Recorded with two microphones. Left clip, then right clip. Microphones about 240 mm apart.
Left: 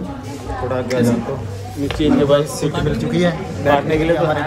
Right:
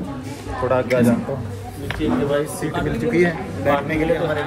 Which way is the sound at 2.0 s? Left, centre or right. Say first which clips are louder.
Left 6 dB; left.